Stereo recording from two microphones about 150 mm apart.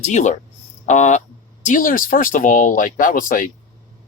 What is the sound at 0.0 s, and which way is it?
Speech, 50° left (ahead or behind).